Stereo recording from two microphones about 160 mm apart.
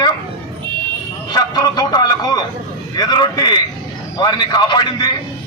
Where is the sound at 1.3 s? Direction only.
25° left (ahead or behind).